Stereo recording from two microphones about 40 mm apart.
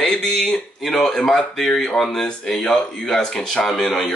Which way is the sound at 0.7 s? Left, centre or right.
Centre.